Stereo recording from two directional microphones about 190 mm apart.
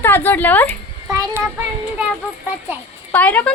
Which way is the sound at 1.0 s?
20° right (ahead or behind).